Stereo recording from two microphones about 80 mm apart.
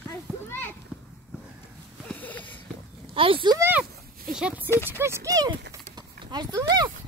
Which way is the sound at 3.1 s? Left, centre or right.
Right.